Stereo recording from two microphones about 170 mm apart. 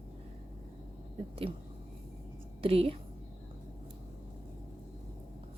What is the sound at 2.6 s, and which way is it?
Speech, 35° right (ahead or behind).